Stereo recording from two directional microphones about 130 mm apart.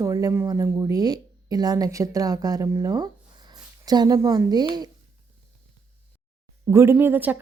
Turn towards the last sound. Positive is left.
turn(degrees=-15)  # may be behind; listen again after turning